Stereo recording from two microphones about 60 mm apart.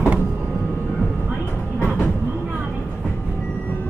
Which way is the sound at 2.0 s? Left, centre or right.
Left.